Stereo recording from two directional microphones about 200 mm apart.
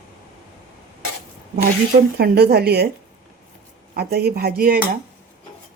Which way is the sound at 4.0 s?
50° right (ahead or behind).